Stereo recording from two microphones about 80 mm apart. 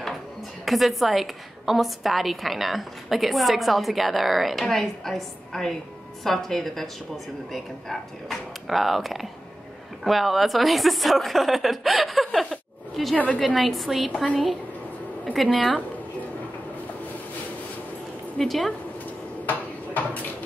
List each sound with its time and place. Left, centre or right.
0.7 s a woman's voice: centre
13.1 s a woman's voice: centre
13.6 s a woman's voice: centre
15.3 s a woman's voice: centre
18.4 s a woman's voice: centre
19.4 s dishes: left